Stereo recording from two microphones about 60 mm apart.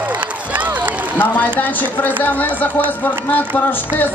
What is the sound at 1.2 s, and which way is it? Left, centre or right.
Speech, left.